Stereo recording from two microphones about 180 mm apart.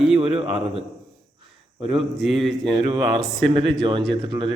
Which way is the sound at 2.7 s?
25° right (ahead or behind).